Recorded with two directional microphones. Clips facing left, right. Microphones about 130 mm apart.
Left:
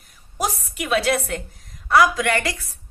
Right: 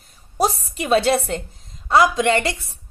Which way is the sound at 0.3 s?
30° right (ahead or behind).